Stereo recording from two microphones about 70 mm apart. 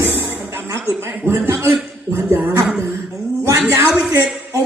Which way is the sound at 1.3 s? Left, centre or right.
Right.